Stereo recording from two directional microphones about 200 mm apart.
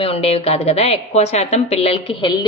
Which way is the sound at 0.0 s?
30° left (ahead or behind).